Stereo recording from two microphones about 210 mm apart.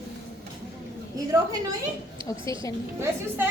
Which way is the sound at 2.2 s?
25° right (ahead or behind).